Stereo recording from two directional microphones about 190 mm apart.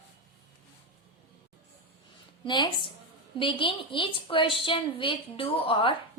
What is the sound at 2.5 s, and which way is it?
A woman's voice, 25° left (ahead or behind).